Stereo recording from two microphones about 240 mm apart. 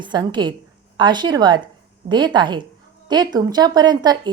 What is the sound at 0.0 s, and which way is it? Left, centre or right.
A woman's voice, centre.